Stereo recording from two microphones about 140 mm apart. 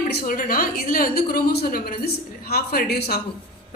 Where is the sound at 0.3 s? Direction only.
85° left.